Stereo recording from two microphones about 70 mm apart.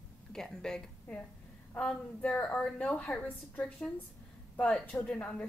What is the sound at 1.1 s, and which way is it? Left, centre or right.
A woman's voice, left.